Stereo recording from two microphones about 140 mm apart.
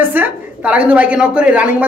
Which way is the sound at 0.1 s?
10° right (ahead or behind).